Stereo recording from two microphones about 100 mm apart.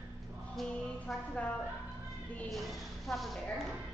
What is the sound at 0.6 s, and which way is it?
Music, 5° left (ahead or behind).